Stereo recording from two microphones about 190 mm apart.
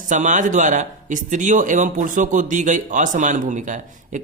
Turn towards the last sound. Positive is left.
turn(degrees=-40)  # may be behind; listen again after turning